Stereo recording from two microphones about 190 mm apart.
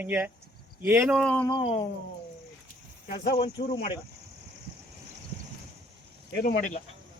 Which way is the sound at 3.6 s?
50° left (ahead or behind).